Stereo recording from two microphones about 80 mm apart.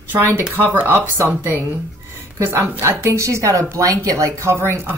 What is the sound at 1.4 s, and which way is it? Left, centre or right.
A woman's voice, right.